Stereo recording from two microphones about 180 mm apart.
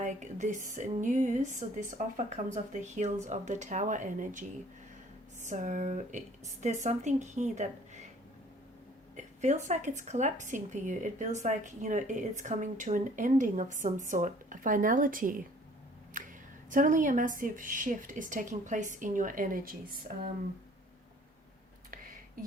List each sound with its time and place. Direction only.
0.0 s a woman's voice: 40° right (ahead or behind)
9.1 s a woman's voice: 40° right (ahead or behind)
16.1 s a sound: 50° right (ahead or behind)
16.6 s a woman's voice: 45° right (ahead or behind)